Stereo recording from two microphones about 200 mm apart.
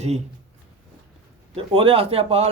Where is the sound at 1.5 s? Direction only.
25° right (ahead or behind).